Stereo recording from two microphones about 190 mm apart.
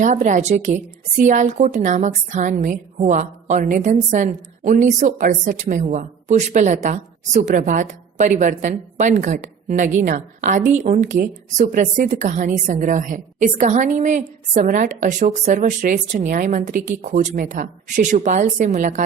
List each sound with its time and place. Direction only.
0.0 s a woman's voice: 40° right (ahead or behind)